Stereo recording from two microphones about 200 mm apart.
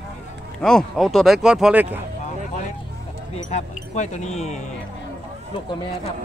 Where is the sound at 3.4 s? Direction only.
35° left (ahead or behind).